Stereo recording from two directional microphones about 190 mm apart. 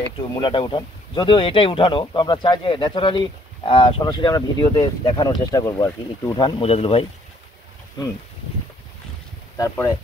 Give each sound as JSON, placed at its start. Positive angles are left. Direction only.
{"t": 0.3, "sound": "speech", "side_deg": 25}
{"t": 9.6, "sound": "speech", "side_deg": 15}